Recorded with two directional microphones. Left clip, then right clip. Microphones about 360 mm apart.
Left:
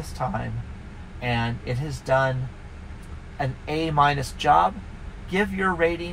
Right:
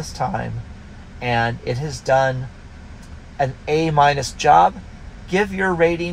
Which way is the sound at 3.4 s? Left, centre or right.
Right.